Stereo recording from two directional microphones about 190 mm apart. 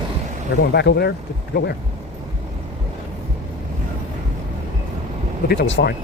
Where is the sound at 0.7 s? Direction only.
60° left (ahead or behind).